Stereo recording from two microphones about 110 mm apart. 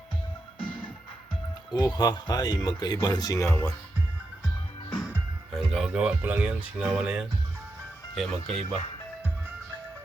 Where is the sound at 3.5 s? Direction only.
20° left (ahead or behind).